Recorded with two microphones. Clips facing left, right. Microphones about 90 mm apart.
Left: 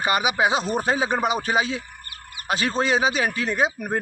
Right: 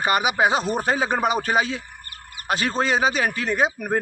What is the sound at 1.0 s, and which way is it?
A man's voice, 35° right (ahead or behind).